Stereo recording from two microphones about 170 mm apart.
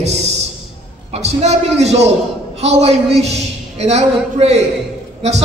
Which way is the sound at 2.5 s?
40° right (ahead or behind).